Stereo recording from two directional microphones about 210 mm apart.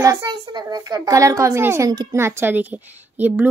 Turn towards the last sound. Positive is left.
turn(degrees=-10)  # may be behind; listen again after turning